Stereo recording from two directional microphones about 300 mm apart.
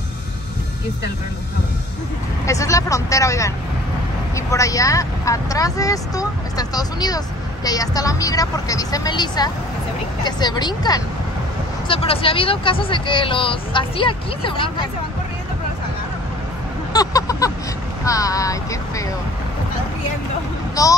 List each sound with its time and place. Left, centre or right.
2.4 s speech: centre
16.9 s a sound: centre
18.0 s speech: centre
20.8 s speech: centre